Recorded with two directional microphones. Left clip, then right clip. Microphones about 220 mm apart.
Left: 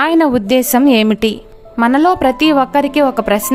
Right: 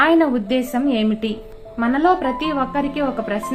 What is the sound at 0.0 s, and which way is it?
Speech, 50° left (ahead or behind).